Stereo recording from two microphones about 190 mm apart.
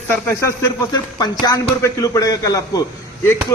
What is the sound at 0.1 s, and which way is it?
Speech, 15° left (ahead or behind).